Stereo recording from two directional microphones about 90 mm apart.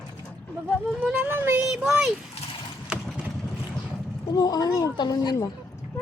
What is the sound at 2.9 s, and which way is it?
Vehicle, 15° right (ahead or behind).